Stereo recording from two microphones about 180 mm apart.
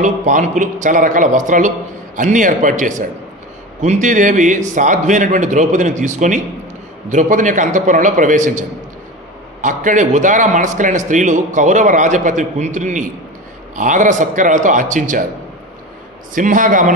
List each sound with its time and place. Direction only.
0.0 s a man's voice: 45° right (ahead or behind)
16.3 s a man's voice: 45° right (ahead or behind)